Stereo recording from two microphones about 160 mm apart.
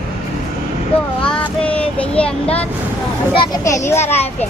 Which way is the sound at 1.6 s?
10° left (ahead or behind).